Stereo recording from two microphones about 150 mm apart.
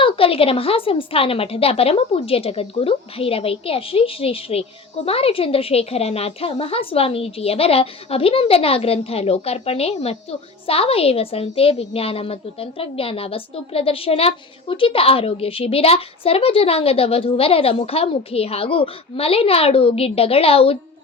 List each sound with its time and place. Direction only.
0.0 s a woman's voice: 40° left (ahead or behind)